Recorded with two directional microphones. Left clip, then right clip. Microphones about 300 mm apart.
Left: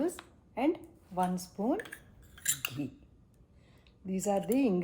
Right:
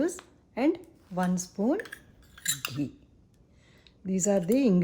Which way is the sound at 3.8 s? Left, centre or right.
Right.